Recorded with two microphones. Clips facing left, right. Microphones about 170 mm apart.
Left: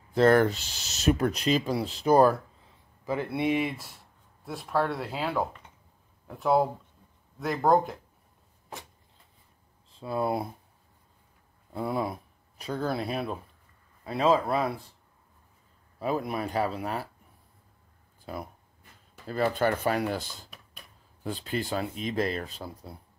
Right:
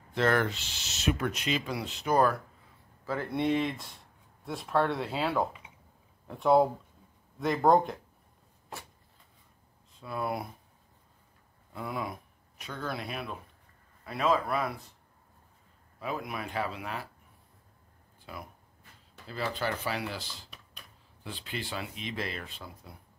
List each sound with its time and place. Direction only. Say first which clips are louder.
0.1 s speech: left 7 dB; 40° left (ahead or behind)
3.1 s speech: left 2 dB; 10° left (ahead or behind)
9.9 s speech: left 5 dB; 30° left (ahead or behind)
11.7 s speech: left 6 dB; 35° left (ahead or behind)
16.0 s speech: left 6 dB; 35° left (ahead or behind)
18.3 s speech: left 7 dB; 35° left (ahead or behind)
19.2 s speech: left 7 dB; 50° left (ahead or behind)